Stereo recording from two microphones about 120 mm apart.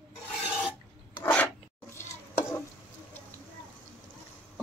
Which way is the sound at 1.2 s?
15° left (ahead or behind).